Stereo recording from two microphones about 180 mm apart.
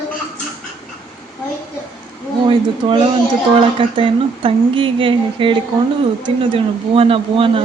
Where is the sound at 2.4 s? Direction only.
30° right (ahead or behind).